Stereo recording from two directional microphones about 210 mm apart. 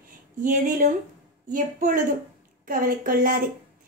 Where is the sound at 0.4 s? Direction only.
40° right (ahead or behind).